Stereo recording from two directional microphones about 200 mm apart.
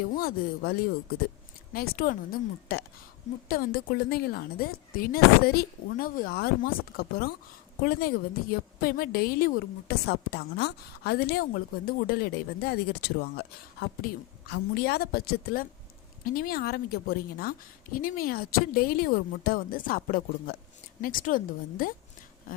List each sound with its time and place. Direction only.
0.2 s a woman's voice: 50° left (ahead or behind)